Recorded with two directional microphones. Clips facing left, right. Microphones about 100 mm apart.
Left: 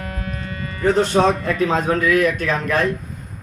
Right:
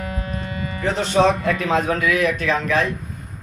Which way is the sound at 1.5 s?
35° left (ahead or behind).